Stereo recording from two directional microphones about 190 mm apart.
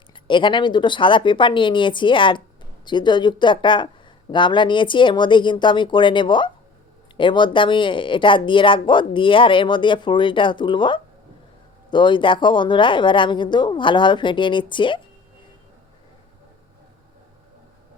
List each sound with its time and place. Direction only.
0.1 s speech: 25° left (ahead or behind)